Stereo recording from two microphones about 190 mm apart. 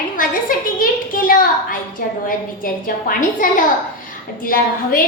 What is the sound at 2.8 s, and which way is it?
A woman's voice, 45° left (ahead or behind).